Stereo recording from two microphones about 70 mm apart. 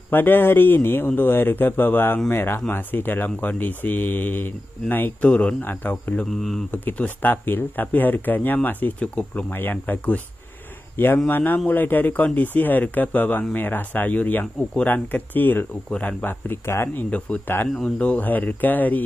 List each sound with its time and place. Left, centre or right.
0.1 s speech: left
5.3 s speech: centre
5.6 s speech: left
6.3 s speech: centre
6.7 s speech: left
11.2 s speech: left
16.3 s speech: left
16.9 s speech: left